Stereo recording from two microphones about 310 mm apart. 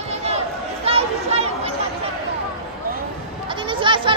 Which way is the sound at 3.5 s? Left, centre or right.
Centre.